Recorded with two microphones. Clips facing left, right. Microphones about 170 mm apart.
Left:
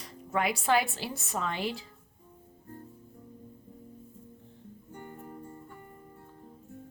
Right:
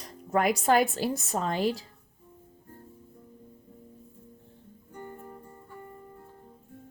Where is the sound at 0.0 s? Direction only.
45° right (ahead or behind).